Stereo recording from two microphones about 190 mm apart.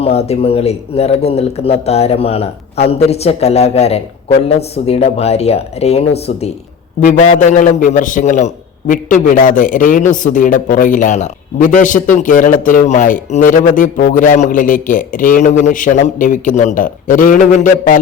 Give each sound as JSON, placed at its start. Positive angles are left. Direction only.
{"t": 0.0, "sound": "speech", "side_deg": 35}